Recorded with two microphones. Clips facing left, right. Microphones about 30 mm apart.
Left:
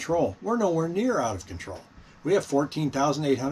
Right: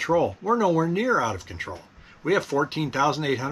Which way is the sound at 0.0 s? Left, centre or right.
Right.